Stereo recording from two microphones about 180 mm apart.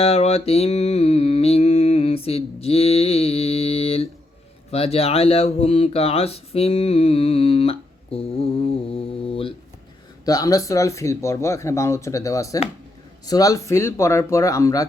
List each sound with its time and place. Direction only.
0.0 s music: 35° left (ahead or behind)
10.2 s speech: 20° left (ahead or behind)